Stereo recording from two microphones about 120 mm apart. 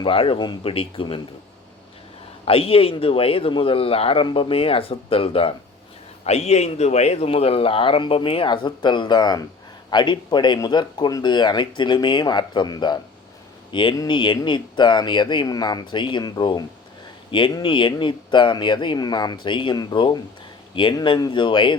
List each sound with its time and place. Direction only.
0.0 s speech: 50° left (ahead or behind)
0.7 s speech: 50° left (ahead or behind)
2.4 s speech: 50° left (ahead or behind)
6.2 s speech: 60° left (ahead or behind); by 21.8 s 40° left (ahead or behind)